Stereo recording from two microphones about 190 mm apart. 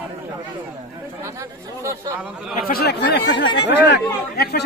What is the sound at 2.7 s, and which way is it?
Speech, 55° left (ahead or behind).